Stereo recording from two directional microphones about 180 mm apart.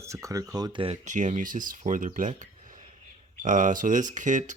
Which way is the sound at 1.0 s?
40° right (ahead or behind).